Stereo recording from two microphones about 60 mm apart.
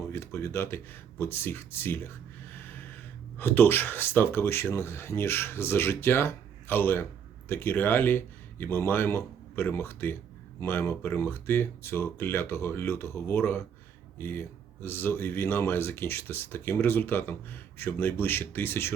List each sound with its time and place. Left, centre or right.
0.1 s speech: left
2.5 s gasp: left
3.3 s speech: left